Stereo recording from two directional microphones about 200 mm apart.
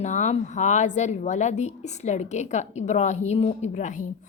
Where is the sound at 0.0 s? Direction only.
35° left (ahead or behind).